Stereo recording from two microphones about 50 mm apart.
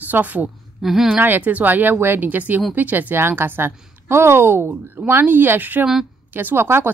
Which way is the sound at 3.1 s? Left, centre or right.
Right.